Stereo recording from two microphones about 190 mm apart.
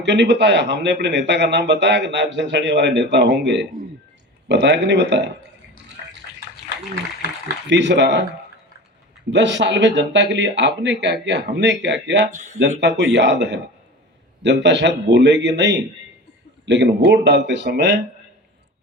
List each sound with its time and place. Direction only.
0.0 s a man's voice: 70° right (ahead or behind)
7.7 s a man's voice: 65° right (ahead or behind)
9.3 s a man's voice: 70° right (ahead or behind)
12.3 s speech: 40° right (ahead or behind)
12.8 s a man's voice: 70° right (ahead or behind)